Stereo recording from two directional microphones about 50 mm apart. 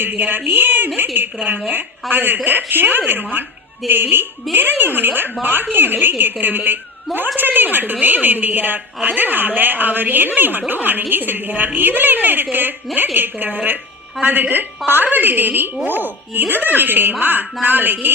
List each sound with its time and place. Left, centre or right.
0.0 s a woman's voice: right